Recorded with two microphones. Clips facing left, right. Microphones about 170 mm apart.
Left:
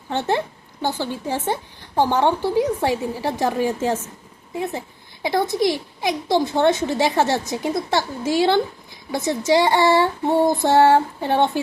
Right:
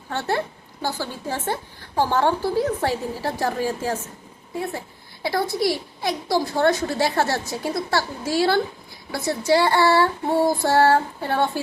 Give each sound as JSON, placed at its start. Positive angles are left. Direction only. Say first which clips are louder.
{"t": 0.1, "sound": "a woman's voice", "louder": "left 3 dB", "side_deg": 20}
{"t": 9.5, "sound": "female singing", "louder": "left 1 dB", "side_deg": 15}